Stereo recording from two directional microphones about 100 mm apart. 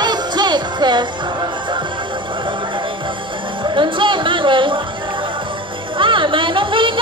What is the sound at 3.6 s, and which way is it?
Music, 55° right (ahead or behind).